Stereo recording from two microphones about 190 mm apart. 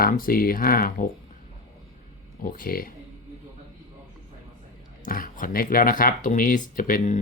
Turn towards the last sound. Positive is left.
turn(degrees=40)  # may be behind; listen again after turning